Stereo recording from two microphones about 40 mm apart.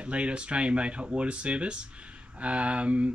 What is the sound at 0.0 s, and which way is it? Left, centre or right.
Speech, right.